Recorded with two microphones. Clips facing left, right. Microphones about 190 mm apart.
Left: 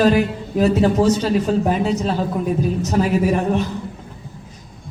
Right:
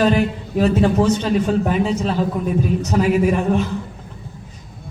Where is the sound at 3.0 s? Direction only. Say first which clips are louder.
Right 1 dB; 40° left (ahead or behind).